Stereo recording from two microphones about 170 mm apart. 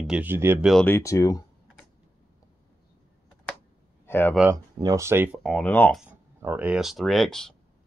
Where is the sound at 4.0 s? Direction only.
10° left (ahead or behind).